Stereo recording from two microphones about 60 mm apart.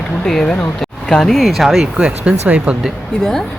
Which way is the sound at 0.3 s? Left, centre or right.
Centre.